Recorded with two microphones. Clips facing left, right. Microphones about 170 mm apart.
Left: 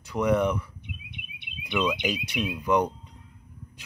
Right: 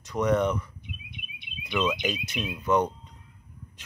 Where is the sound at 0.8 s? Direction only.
65° left (ahead or behind).